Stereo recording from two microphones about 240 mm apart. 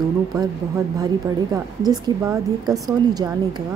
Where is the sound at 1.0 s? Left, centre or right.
Centre.